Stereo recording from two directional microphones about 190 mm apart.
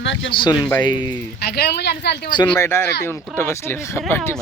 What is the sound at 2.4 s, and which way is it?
Speech, 10° left (ahead or behind).